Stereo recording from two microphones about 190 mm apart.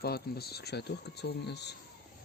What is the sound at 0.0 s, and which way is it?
Speech, 55° left (ahead or behind).